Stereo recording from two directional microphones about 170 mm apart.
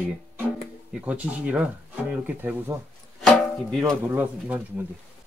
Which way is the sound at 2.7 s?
20° right (ahead or behind).